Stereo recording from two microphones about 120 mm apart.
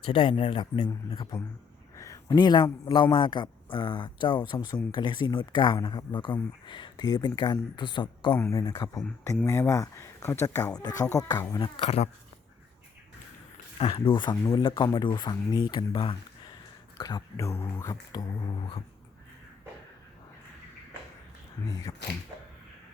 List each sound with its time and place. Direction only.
0.0 s speech: 45° left (ahead or behind)
2.0 s a sound: 30° left (ahead or behind)
2.9 s speech: 45° left (ahead or behind)
8.4 s speech: 25° left (ahead or behind)
8.6 s speech: 35° left (ahead or behind)
11.6 s speech: 55° left (ahead or behind)
13.7 s speech: 50° left (ahead or behind); by 17.9 s 25° left (ahead or behind)
18.1 s speech: 35° left (ahead or behind)